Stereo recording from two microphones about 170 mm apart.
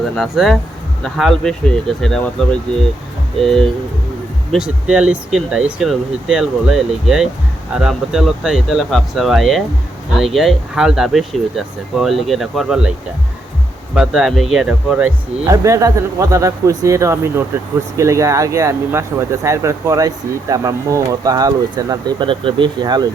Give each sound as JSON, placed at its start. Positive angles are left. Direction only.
{"t": 0.2, "sound": "speech", "side_deg": 0}
{"t": 4.5, "sound": "speech", "side_deg": -5}
{"t": 13.9, "sound": "speech", "side_deg": -5}